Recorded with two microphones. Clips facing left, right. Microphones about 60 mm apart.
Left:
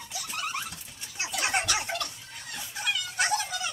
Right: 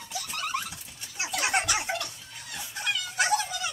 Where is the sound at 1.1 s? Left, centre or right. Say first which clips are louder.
Right 1 dB; centre.